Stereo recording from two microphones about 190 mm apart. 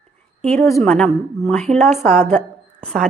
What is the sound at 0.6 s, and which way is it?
Speech, 15° left (ahead or behind).